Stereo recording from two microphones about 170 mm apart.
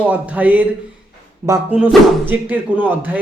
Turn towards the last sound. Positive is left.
turn(degrees=-10)  # may be behind; listen again after turning